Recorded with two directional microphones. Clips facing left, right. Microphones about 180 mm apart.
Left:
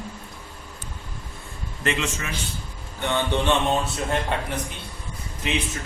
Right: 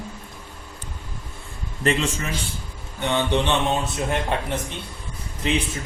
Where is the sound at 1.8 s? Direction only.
35° right (ahead or behind).